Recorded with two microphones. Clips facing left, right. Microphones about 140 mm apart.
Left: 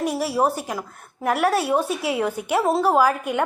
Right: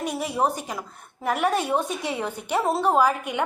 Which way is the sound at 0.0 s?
5° left (ahead or behind).